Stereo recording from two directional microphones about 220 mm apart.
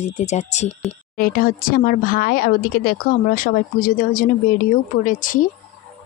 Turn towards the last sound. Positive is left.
turn(degrees=35)  # may be behind; listen again after turning